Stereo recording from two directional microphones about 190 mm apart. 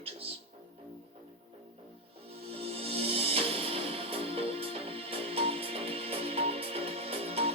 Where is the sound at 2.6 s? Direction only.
30° right (ahead or behind).